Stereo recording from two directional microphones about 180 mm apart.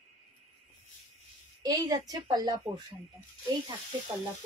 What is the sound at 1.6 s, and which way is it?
Speech, 20° right (ahead or behind).